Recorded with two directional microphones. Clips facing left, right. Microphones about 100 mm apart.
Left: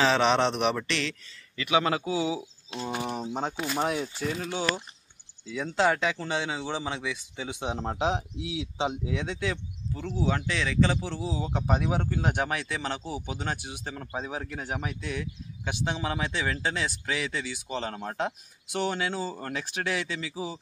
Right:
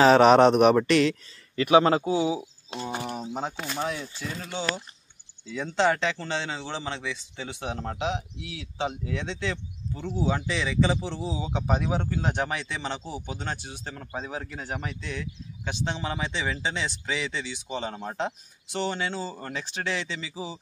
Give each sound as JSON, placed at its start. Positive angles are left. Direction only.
{"t": 0.0, "sound": "speech", "side_deg": -40}
{"t": 3.0, "sound": "speech", "side_deg": 0}
{"t": 3.7, "sound": "speech", "side_deg": 15}